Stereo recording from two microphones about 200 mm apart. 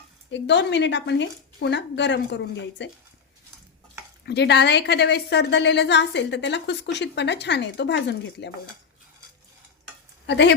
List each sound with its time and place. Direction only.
0.3 s a woman's voice: 60° left (ahead or behind)
4.3 s a woman's voice: 60° left (ahead or behind)
10.2 s a woman's voice: 60° left (ahead or behind)